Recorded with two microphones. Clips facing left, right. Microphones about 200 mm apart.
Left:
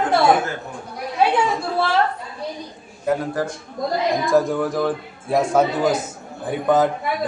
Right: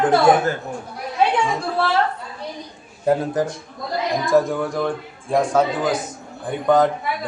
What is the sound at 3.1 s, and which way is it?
Speech, 30° right (ahead or behind).